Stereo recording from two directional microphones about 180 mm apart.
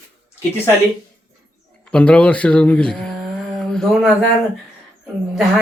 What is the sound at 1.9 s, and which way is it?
Speech, 5° left (ahead or behind).